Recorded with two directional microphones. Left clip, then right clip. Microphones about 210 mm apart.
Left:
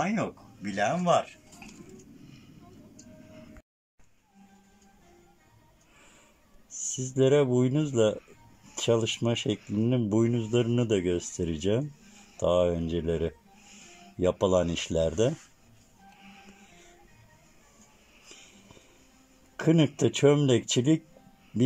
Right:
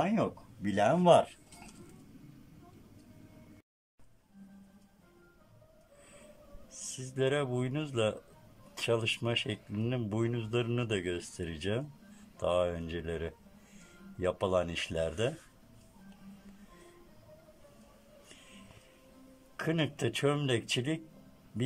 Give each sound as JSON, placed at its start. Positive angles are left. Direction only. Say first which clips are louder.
{"t": 0.7, "sound": "speech", "louder": "right 1 dB", "side_deg": -35}
{"t": 6.9, "sound": "speech", "louder": "left 8 dB", "side_deg": 20}
{"t": 19.6, "sound": "speech", "louder": "left 8 dB", "side_deg": 25}